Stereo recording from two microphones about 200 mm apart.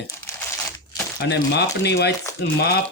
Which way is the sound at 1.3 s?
55° left (ahead or behind).